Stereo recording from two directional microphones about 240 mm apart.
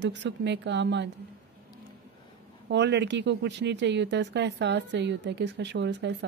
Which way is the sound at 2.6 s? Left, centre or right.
Right.